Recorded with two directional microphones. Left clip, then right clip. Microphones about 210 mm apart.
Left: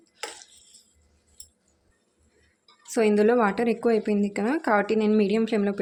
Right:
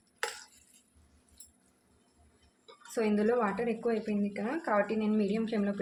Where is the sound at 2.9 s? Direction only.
45° left (ahead or behind).